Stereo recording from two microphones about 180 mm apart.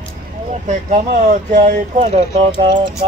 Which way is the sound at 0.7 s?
45° right (ahead or behind).